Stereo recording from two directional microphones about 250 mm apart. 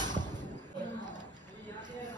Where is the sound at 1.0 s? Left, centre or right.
Centre.